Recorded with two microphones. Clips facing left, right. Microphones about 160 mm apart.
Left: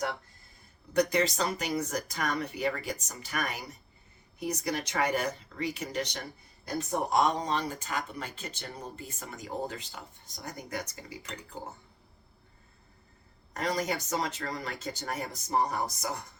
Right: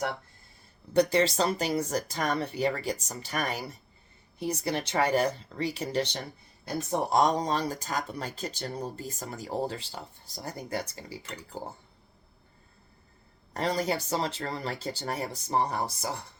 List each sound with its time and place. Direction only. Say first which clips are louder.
0.9 s speech: right 3 dB; 30° right (ahead or behind)
13.5 s speech: right 3 dB; 30° right (ahead or behind)